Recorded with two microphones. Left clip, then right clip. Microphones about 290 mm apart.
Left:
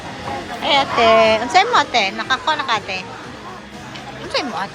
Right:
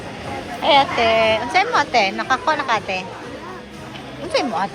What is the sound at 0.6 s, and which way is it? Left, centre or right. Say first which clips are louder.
A woman's voice: even; centre.